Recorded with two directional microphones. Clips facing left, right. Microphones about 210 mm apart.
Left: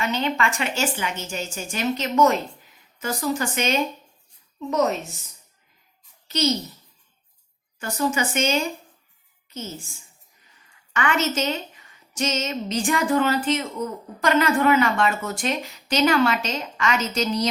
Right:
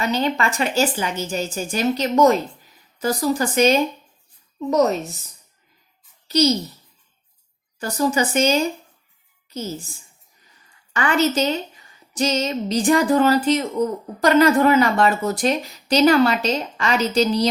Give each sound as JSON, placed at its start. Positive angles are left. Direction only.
{"t": 0.0, "sound": "a woman's voice", "side_deg": -35}
{"t": 6.2, "sound": "a sound", "side_deg": -35}
{"t": 7.8, "sound": "a woman's voice", "side_deg": -35}
{"t": 10.9, "sound": "a woman's voice", "side_deg": -35}